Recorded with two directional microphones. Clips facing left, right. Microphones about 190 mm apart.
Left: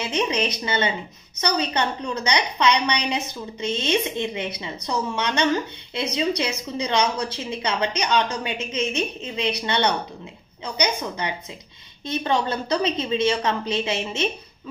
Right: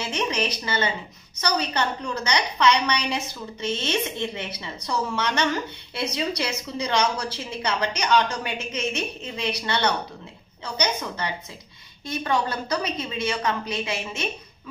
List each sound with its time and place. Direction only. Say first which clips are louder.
0.0 s a woman's voice: left 3 dB; 20° left (ahead or behind)